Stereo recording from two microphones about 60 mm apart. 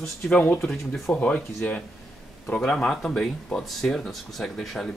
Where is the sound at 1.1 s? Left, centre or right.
Left.